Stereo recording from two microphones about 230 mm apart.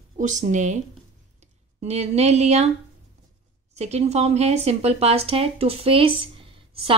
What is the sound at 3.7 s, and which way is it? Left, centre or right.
Speech, right.